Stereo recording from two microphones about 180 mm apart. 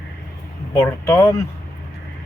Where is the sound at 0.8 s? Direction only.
15° left (ahead or behind).